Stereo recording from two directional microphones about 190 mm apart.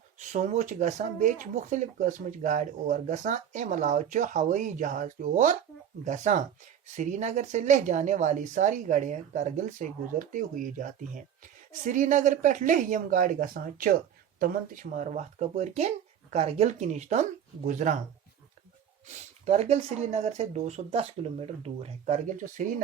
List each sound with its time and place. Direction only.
0.2 s speech: 40° right (ahead or behind)
19.0 s speech: 35° right (ahead or behind)